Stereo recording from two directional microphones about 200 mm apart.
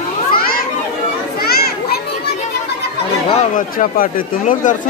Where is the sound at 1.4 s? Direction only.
50° left (ahead or behind).